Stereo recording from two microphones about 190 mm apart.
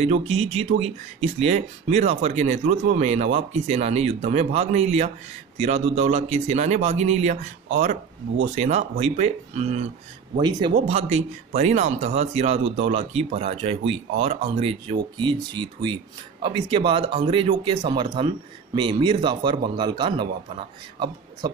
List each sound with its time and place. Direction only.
0.0 s speech: 30° right (ahead or behind)
10.3 s speech: 25° right (ahead or behind)
10.9 s speech: 35° right (ahead or behind)